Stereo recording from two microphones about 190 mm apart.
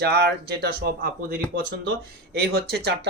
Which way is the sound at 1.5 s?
70° right (ahead or behind).